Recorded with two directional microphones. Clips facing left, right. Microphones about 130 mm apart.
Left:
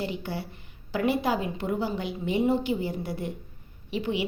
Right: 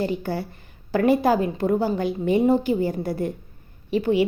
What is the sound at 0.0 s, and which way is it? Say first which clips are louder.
A woman's voice: right 7 dB; 45° right (ahead or behind).